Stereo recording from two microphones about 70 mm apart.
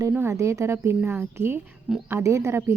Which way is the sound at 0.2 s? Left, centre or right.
Right.